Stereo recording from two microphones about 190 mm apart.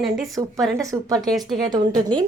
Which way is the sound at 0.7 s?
15° right (ahead or behind).